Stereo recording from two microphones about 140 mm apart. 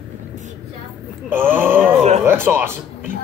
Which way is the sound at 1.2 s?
15° right (ahead or behind).